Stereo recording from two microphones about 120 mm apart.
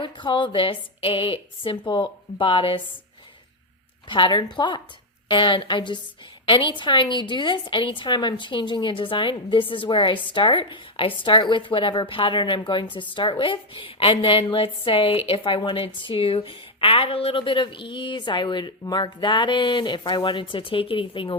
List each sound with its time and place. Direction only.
0.0 s a woman's voice: 40° left (ahead or behind)
4.1 s a woman's voice: 40° left (ahead or behind)